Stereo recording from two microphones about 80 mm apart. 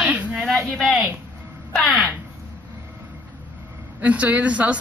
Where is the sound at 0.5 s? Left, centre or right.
Centre.